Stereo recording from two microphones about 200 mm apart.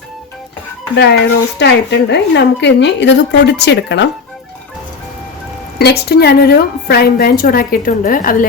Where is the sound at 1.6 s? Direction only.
60° left (ahead or behind).